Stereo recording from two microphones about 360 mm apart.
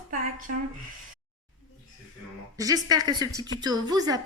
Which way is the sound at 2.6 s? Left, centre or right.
Centre.